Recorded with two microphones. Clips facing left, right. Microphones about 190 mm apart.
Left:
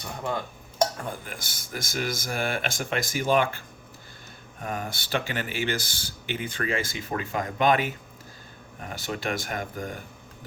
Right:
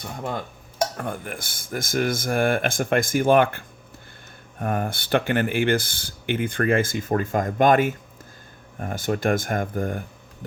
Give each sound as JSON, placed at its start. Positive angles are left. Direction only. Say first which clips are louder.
{"t": 0.9, "sound": "speech", "louder": "right 5 dB", "side_deg": -60}
{"t": 4.6, "sound": "speech", "louder": "right 7 dB", "side_deg": -55}